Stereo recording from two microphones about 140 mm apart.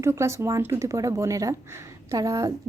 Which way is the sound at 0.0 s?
20° right (ahead or behind).